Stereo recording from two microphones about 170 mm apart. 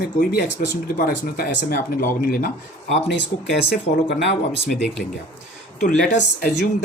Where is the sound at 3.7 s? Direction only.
85° left.